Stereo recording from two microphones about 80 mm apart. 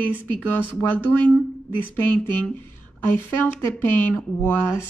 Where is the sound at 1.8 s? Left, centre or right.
Left.